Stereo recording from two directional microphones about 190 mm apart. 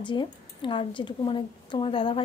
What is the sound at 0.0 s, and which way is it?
Speech, 25° left (ahead or behind).